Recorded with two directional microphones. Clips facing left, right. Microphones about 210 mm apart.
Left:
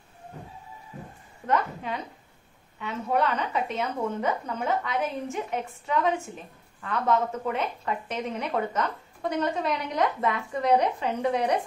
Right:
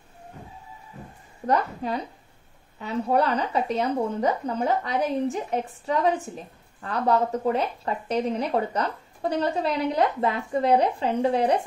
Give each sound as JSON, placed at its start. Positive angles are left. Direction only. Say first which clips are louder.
{"t": 1.5, "sound": "speech", "louder": "right 3 dB", "side_deg": -35}